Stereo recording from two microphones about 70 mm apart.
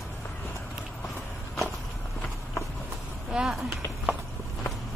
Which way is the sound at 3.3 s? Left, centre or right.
Centre.